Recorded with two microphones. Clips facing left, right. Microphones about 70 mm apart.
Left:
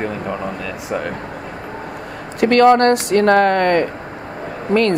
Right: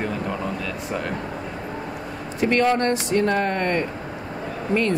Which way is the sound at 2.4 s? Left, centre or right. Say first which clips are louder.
Left 8 dB; left.